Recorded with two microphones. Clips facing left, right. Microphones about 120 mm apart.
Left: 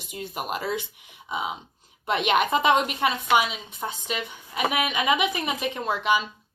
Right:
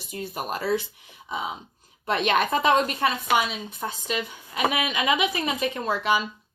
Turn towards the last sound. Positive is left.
turn(degrees=15)  # may be behind; listen again after turning